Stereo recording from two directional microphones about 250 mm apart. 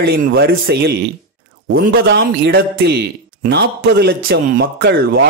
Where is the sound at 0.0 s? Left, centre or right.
Right.